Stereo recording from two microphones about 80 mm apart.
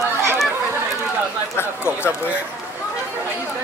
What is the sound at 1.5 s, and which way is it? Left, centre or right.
Speech, left.